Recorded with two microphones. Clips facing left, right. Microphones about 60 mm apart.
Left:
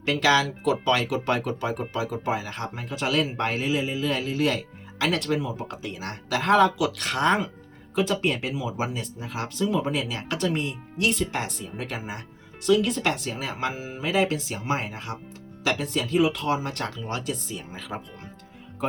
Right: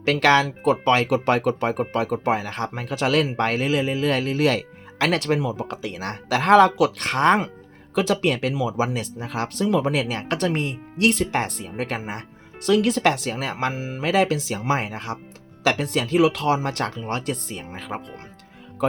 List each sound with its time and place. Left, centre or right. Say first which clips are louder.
0.0 s speech: right 4 dB; right
1.1 s speech: right 6 dB; right
6.9 s speech: right 4 dB; right
7.9 s speech: right 3 dB; right
11.3 s speech: right 5 dB; right
12.6 s speech: right 3 dB; right
17.0 s speech: right 4 dB; right